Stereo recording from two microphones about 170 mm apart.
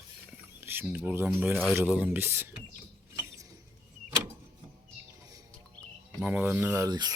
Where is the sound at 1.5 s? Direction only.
5° left (ahead or behind).